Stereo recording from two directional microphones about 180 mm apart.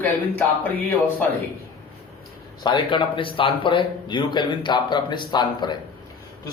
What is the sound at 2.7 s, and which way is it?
A man's voice, 25° left (ahead or behind).